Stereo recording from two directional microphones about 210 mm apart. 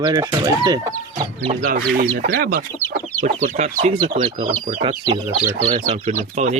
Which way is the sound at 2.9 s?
35° right (ahead or behind).